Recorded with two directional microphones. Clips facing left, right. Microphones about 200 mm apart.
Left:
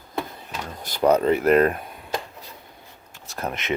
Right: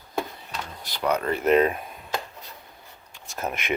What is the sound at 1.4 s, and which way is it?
Speech, centre (ahead or behind).